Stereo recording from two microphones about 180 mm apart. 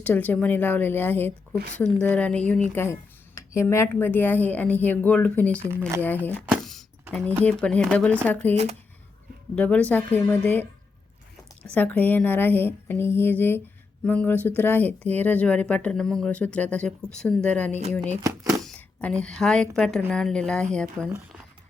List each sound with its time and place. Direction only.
0.0 s speech: 10° left (ahead or behind)
6.5 s a sound: centre (ahead or behind)
7.4 s speech: 5° left (ahead or behind)
9.6 s speech: 10° left (ahead or behind)
11.7 s a woman's voice: 10° left (ahead or behind)
18.2 s speech: 15° right (ahead or behind)
18.6 s a woman's voice: 5° left (ahead or behind)